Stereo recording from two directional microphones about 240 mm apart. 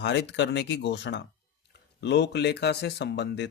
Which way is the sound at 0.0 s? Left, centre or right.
Left.